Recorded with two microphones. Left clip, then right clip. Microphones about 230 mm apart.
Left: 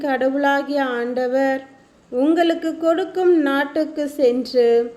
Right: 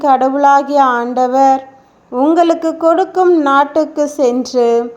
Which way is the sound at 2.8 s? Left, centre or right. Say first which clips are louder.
Right 7 dB; centre.